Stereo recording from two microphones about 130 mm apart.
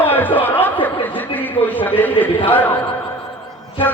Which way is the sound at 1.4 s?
15° left (ahead or behind).